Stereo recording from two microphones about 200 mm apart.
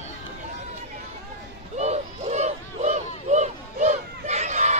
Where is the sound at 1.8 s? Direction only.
35° right (ahead or behind).